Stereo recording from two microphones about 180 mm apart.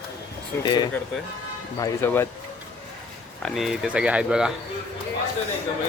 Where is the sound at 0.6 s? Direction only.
25° left (ahead or behind).